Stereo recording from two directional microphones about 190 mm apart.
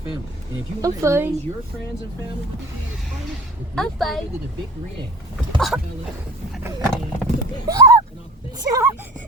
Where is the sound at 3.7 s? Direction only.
Centre (ahead or behind).